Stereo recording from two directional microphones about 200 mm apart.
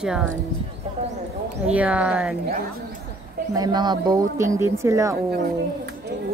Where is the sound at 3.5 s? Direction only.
20° right (ahead or behind).